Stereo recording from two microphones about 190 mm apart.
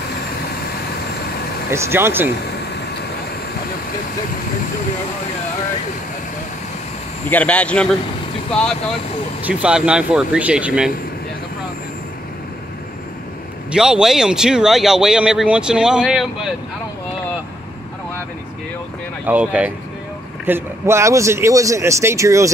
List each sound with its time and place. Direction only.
1.7 s speech: 15° right (ahead or behind)
7.2 s speech: 10° left (ahead or behind)
9.4 s speech: 5° right (ahead or behind)
13.7 s speech: 5° right (ahead or behind)
19.2 s speech: 10° right (ahead or behind)